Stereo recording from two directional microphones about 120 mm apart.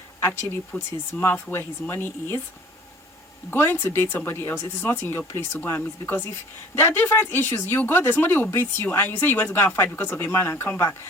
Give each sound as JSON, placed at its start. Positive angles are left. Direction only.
{"t": 0.2, "sound": "speech", "side_deg": 20}
{"t": 3.5, "sound": "speech", "side_deg": 20}